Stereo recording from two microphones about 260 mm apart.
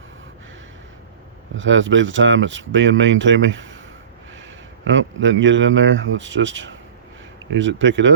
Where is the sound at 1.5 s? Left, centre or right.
Right.